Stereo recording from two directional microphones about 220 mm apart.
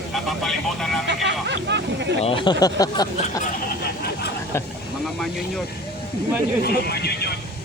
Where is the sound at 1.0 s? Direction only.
55° right (ahead or behind).